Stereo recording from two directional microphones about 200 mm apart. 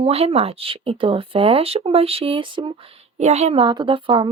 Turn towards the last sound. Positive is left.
turn(degrees=-25)  # may be behind; listen again after turning